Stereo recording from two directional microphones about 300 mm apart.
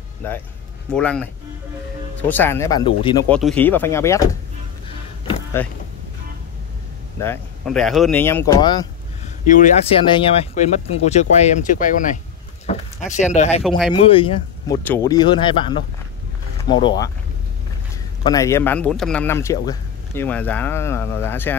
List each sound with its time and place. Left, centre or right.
0.9 s speech: centre
3.3 s speech: centre
5.2 s vehicle: centre
7.2 s speech: centre
9.5 s speech: left
13.6 s speech: centre
13.8 s speech: centre
16.6 s speech: centre
18.2 s speech: centre